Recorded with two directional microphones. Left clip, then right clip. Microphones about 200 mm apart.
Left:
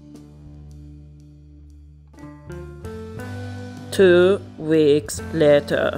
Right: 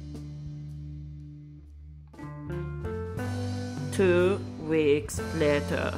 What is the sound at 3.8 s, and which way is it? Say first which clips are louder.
Speech: left 10 dB; 30° left (ahead or behind).